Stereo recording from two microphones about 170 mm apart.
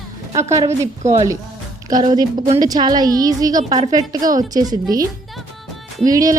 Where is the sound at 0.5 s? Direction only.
20° right (ahead or behind).